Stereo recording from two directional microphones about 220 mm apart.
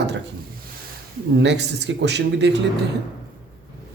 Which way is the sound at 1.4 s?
50° right (ahead or behind).